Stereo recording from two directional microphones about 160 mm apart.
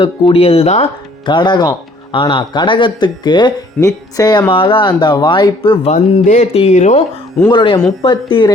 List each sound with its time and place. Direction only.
0.0 s speech: 35° left (ahead or behind)
5.9 s speech: 45° left (ahead or behind)
7.5 s speech: 30° left (ahead or behind)